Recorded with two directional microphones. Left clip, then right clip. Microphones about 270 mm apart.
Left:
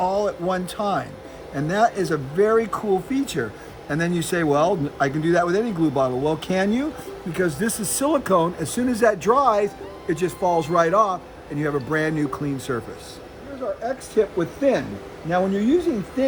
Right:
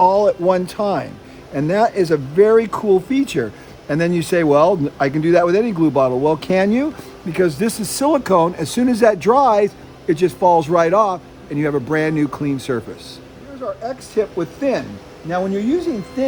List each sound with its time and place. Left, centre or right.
0.0 s speech: right
14.2 s speech: centre